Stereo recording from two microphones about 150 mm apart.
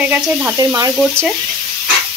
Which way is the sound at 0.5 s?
25° right (ahead or behind).